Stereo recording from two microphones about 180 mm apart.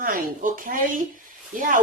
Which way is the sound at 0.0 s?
50° right (ahead or behind).